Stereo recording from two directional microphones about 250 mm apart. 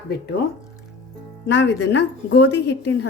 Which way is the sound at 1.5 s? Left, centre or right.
Left.